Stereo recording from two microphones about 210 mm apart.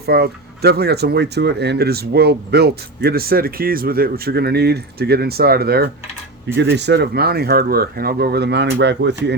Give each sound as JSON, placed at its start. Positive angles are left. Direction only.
{"t": 0.0, "sound": "speech", "side_deg": -50}